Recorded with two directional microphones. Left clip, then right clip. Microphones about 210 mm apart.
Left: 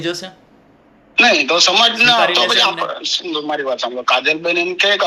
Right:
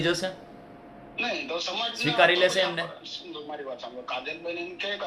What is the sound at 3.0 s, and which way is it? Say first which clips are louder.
A man's voice: left 18 dB; 55° left (ahead or behind).